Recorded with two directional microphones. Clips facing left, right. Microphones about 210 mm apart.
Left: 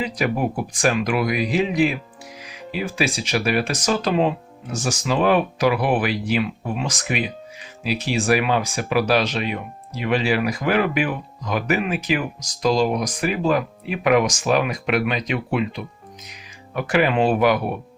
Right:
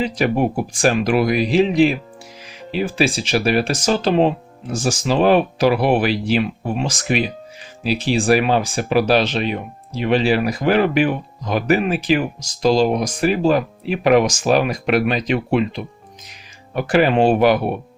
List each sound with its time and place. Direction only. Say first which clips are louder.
0.0 s speech: right 4 dB; 30° right (ahead or behind)